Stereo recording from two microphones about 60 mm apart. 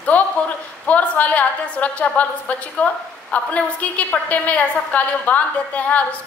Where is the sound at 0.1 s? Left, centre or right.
Left.